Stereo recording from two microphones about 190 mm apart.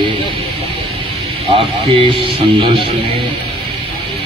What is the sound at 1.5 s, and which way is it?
Speech, 30° right (ahead or behind).